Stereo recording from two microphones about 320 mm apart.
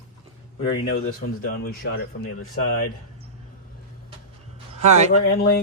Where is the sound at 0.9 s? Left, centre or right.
Left.